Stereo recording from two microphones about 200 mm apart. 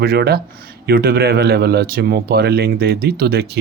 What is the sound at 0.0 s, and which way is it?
Speech, 50° right (ahead or behind).